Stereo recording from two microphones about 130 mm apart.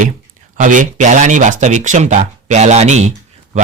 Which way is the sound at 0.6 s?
80° right.